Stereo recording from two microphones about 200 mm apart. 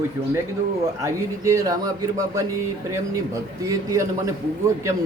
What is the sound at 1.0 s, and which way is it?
Speech, 15° right (ahead or behind).